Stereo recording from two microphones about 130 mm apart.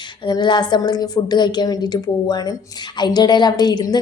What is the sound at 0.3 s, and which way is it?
A woman's voice, 35° left (ahead or behind).